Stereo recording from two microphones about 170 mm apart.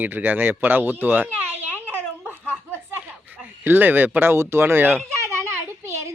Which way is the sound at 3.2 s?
10° right (ahead or behind).